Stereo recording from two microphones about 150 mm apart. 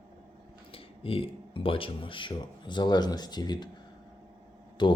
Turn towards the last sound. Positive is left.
turn(degrees=30)  # may be behind; listen again after turning